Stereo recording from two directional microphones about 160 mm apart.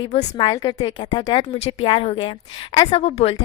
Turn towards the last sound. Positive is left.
turn(degrees=40)  # may be behind; listen again after turning